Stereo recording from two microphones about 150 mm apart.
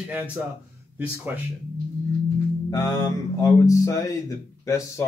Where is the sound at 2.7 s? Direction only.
25° left (ahead or behind).